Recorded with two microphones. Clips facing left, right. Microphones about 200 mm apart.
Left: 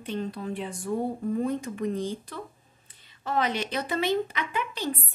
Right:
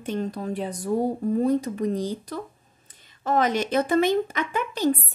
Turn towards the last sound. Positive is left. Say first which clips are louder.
# right 7 dB
turn(degrees=-45)  # may be behind; listen again after turning